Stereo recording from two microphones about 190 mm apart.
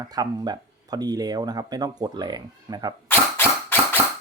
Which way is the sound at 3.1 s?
10° left (ahead or behind).